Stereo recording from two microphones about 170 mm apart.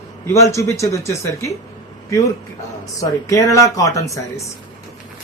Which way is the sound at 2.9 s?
20° left (ahead or behind).